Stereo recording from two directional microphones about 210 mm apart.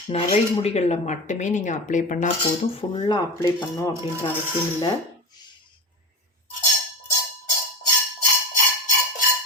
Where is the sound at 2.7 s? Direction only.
25° left (ahead or behind).